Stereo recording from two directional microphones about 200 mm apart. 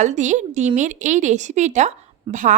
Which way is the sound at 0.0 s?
35° right (ahead or behind).